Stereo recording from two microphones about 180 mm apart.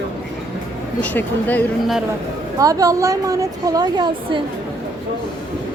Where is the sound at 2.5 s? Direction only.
20° right (ahead or behind).